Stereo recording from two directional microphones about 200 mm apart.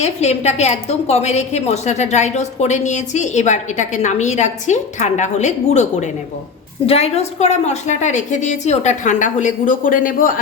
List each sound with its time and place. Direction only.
0.0 s a woman's voice: 35° left (ahead or behind)